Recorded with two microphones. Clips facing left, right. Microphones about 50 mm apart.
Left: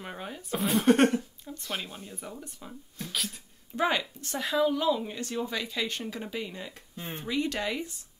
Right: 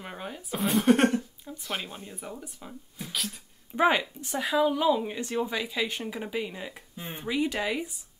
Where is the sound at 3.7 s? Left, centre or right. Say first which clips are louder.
Right 4 dB; centre.